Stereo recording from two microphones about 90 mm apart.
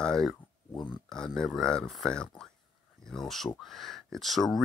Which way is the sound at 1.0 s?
5° left (ahead or behind).